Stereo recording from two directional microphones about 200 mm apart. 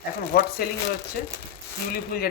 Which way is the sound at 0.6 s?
50° left (ahead or behind).